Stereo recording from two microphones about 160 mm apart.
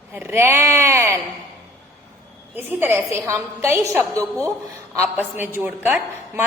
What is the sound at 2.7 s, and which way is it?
A woman's voice, 15° right (ahead or behind).